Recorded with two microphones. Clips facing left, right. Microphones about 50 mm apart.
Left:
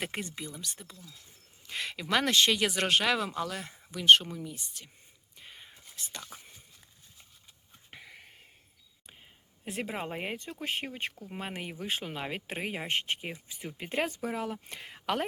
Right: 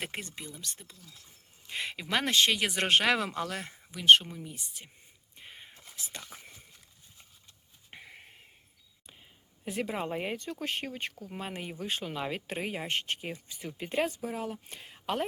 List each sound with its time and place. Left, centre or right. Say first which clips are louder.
0.0 s speech: left 2 dB; centre
1.7 s speech: left 2 dB; centre
2.8 s speech: right 4 dB; right
3.7 s speech: even; centre
5.4 s whispering: right 1 dB; centre
7.9 s a sound: even; centre
9.8 s speech: right 2 dB; centre
10.8 s speech: even; left
12.0 s speech: right 2 dB; left
12.3 s speech: right 1 dB; left
14.1 s speech: left 2 dB; left